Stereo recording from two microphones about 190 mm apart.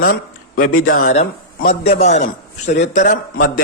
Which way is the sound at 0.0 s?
45° left (ahead or behind).